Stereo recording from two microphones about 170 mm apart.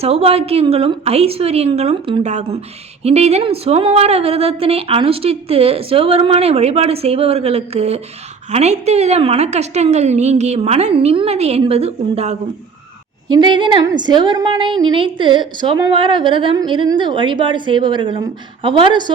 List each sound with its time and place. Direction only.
0.0 s a woman's voice: 35° right (ahead or behind)